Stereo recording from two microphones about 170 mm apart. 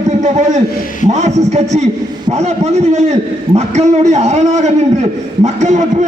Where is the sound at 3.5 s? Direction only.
40° right (ahead or behind).